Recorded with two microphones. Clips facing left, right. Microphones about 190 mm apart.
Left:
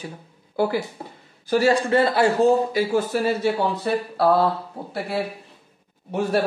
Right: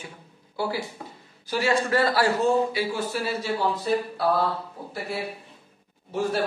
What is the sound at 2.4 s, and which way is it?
A man's voice, 50° left (ahead or behind).